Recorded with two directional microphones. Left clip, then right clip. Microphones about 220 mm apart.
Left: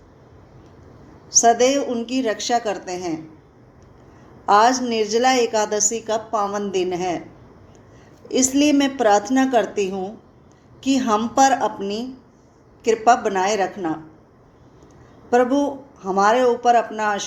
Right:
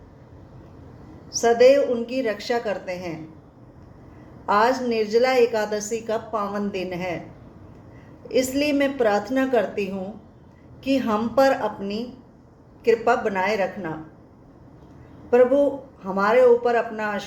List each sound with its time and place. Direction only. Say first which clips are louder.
1.3 s a woman's voice: even; 30° left (ahead or behind)
4.4 s a woman's voice: left 4 dB; 30° left (ahead or behind)
8.3 s a woman's voice: left 3 dB; 30° left (ahead or behind)
15.3 s a woman's voice: right 1 dB; 30° left (ahead or behind)